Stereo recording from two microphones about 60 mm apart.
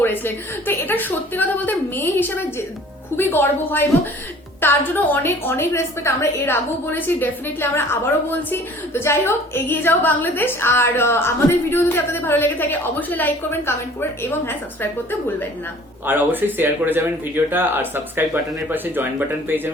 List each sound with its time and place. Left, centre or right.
0.0 s a woman's voice: left
6.4 s a woman's voice: left
16.0 s speech: right